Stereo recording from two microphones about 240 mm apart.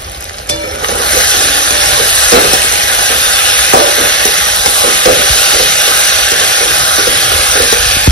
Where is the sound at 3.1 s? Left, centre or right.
Right.